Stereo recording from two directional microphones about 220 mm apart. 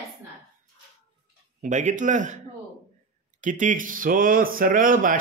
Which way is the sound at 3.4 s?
35° right (ahead or behind).